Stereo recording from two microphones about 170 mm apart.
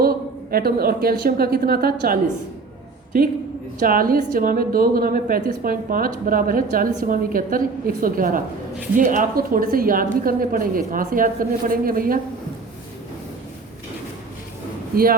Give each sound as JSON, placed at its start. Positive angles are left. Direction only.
{"t": 0.5, "sound": "a woman's voice", "side_deg": -65}
{"t": 3.8, "sound": "a woman's voice", "side_deg": -55}